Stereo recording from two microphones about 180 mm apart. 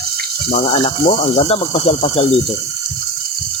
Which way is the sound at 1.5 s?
35° left (ahead or behind).